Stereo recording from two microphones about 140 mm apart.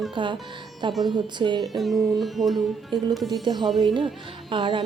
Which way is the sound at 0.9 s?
Centre (ahead or behind).